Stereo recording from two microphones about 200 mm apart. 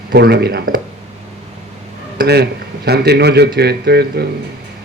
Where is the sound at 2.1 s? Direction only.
55° right (ahead or behind).